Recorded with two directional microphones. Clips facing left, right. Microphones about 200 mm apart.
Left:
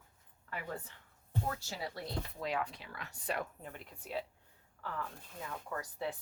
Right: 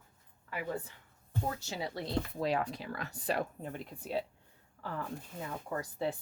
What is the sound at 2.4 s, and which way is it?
A woman's voice, 35° right (ahead or behind).